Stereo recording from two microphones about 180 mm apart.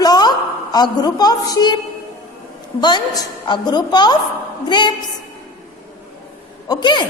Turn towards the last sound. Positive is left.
turn(degrees=25)  # may be behind; listen again after turning